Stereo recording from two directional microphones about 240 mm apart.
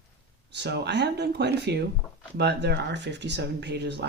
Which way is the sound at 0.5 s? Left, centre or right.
Right.